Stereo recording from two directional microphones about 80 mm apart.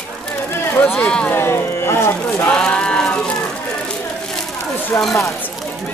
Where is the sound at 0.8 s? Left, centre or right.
Centre.